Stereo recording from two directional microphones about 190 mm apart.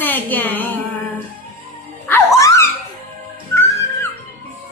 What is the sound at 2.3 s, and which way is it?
Dog, 15° left (ahead or behind).